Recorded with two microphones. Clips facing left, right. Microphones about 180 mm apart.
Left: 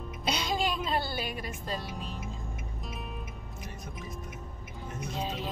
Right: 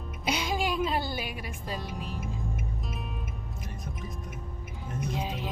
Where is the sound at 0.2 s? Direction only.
10° right (ahead or behind).